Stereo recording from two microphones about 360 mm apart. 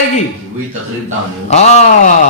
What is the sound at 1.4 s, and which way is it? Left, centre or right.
Speech, centre.